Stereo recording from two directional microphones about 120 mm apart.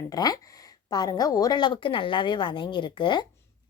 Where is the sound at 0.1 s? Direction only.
35° left (ahead or behind).